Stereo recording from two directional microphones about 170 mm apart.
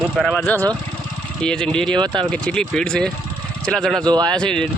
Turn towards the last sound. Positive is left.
turn(degrees=5)  # may be behind; listen again after turning